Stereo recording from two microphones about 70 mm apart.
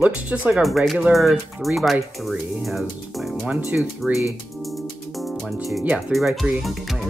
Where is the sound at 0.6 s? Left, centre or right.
Centre.